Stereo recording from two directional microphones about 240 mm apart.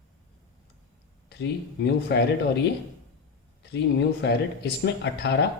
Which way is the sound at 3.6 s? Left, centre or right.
Left.